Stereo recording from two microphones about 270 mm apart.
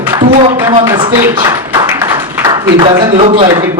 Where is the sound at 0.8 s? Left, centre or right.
Centre.